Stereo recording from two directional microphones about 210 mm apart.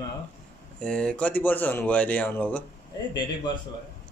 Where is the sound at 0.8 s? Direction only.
5° left (ahead or behind).